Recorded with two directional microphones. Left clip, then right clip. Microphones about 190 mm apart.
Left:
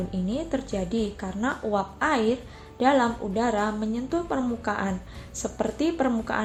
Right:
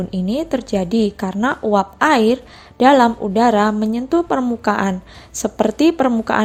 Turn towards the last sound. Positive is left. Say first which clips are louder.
# right 10 dB
turn(degrees=-50)  # may be behind; listen again after turning